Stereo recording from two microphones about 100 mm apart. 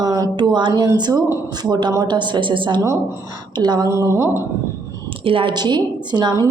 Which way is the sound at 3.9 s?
30° right (ahead or behind).